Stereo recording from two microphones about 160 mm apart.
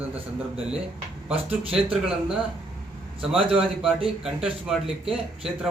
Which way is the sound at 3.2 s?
35° right (ahead or behind).